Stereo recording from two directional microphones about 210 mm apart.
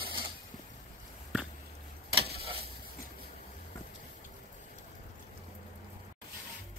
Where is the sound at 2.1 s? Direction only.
25° right (ahead or behind).